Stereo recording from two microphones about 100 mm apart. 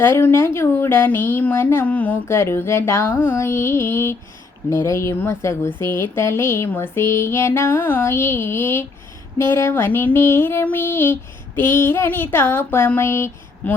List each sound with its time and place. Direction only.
0.0 s speech: 25° left (ahead or behind)
2.2 s speech: 25° left (ahead or behind)
13.0 s a sound: 25° left (ahead or behind)